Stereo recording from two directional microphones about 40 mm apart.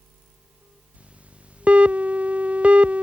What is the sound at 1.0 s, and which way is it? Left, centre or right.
Music, right.